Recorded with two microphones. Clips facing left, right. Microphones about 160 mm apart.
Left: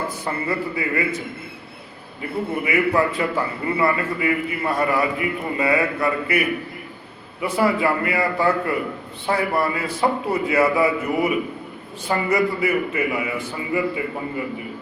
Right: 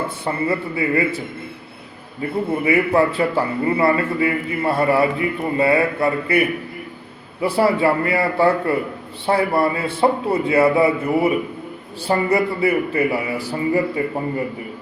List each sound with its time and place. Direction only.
0.4 s a man's voice: 30° right (ahead or behind)
2.2 s a man's voice: 35° right (ahead or behind)
7.4 s a man's voice: 30° right (ahead or behind)